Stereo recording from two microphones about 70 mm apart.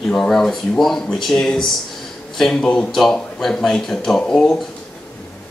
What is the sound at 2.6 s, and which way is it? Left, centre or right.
Speech, centre.